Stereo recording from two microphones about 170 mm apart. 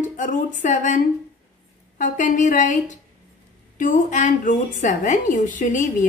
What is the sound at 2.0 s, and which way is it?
A woman's voice, 45° left (ahead or behind).